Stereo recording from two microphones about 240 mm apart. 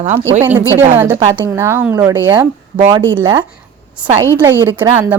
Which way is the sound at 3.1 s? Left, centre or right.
Centre.